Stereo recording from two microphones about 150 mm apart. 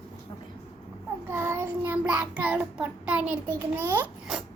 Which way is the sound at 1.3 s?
15° right (ahead or behind).